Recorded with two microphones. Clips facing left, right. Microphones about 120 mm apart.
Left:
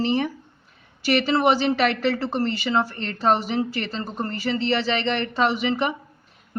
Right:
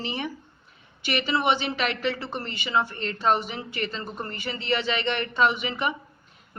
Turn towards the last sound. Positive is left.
turn(degrees=35)  # may be behind; listen again after turning